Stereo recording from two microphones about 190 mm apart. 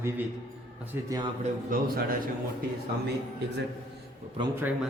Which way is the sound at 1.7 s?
50° right (ahead or behind).